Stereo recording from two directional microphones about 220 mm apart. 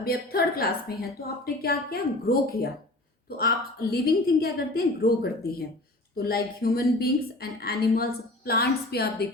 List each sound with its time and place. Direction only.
0.0 s a woman's voice: 45° left (ahead or behind)